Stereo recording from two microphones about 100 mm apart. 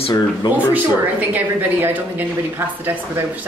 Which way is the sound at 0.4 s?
50° left (ahead or behind).